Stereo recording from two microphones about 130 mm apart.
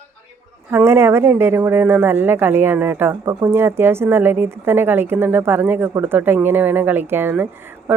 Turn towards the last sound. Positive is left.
turn(degrees=-15)  # may be behind; listen again after turning